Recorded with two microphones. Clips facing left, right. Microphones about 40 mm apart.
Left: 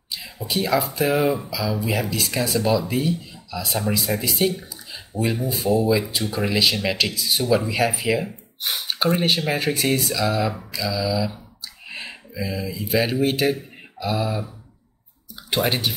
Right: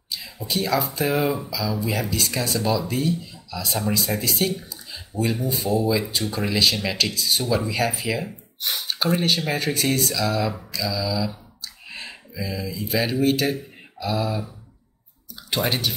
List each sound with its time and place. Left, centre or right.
0.5 s speech: centre
1.5 s speech: centre
2.0 s speech: centre
15.5 s speech: centre